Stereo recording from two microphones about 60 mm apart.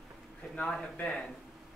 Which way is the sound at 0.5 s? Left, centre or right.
Centre.